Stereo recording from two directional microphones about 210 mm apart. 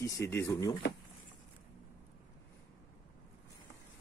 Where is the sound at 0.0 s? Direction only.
10° left (ahead or behind).